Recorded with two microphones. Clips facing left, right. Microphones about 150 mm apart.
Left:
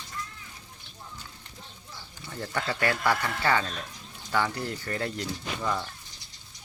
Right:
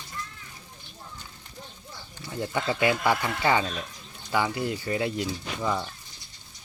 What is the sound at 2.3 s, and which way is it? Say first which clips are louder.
Speech: right 3 dB; 15° right (ahead or behind).